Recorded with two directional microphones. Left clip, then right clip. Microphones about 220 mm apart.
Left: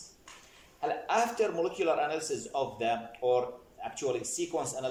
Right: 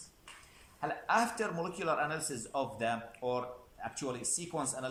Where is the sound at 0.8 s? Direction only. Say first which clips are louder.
Left 2 dB; 10° left (ahead or behind).